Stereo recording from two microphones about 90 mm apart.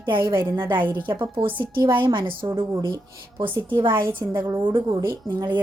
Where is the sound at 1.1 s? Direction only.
65° right (ahead or behind).